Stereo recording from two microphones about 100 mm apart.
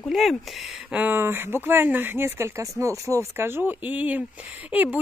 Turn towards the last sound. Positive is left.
turn(degrees=-15)  # may be behind; listen again after turning